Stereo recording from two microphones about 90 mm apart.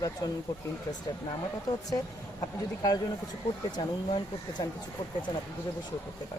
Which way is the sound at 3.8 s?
55° left (ahead or behind).